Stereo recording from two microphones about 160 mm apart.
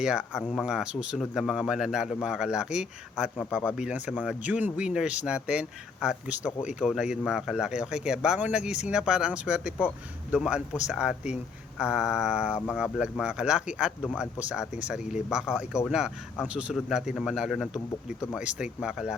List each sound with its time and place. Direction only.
0.0 s speech: 5° right (ahead or behind)
4.1 s speech: 5° left (ahead or behind)
4.4 s speech: 10° right (ahead or behind)
17.7 s speech: 15° left (ahead or behind)
18.3 s speech: 5° right (ahead or behind)